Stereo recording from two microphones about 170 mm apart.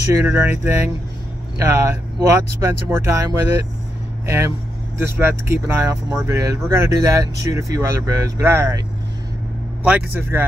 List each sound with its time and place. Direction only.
0.1 s speech: 10° right (ahead or behind)
5.0 s speech: 15° right (ahead or behind)
9.8 s speech: 10° right (ahead or behind)